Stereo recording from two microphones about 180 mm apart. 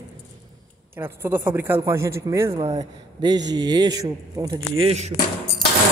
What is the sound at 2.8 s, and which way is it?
Speech, 20° right (ahead or behind).